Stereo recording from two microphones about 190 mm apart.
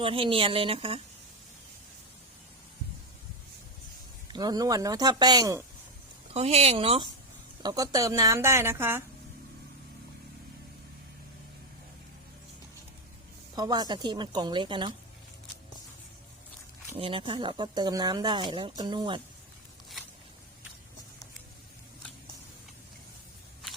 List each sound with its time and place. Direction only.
0.0 s speech: 30° right (ahead or behind)
4.3 s speech: 20° right (ahead or behind)
6.3 s a woman's voice: 35° right (ahead or behind); by 9.0 s 10° right (ahead or behind)
13.6 s speech: 20° right (ahead or behind)
17.0 s speech: 25° right (ahead or behind)